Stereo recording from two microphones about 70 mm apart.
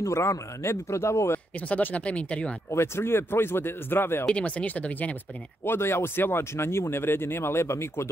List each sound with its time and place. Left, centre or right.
0.0 s speech: left
1.7 s speech: left
2.7 s speech: left
4.3 s speech: centre
5.7 s speech: left